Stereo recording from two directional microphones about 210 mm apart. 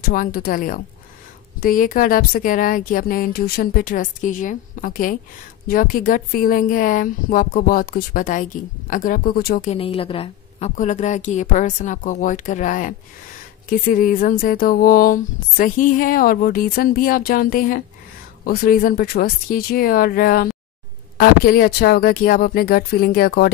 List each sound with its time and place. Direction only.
0.0 s speech: 40° left (ahead or behind)
9.8 s speech: 25° left (ahead or behind); by 23.5 s 45° left (ahead or behind)